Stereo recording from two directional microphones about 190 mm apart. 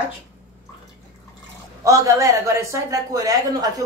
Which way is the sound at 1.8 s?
15° right (ahead or behind).